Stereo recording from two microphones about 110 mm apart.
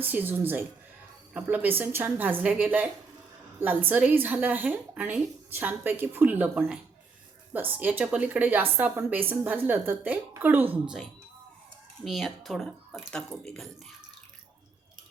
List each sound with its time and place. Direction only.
0.0 s a woman's voice: 15° right (ahead or behind)
10.8 s speech: 5° right (ahead or behind)